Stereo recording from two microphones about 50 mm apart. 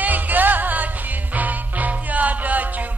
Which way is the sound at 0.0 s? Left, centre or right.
Right.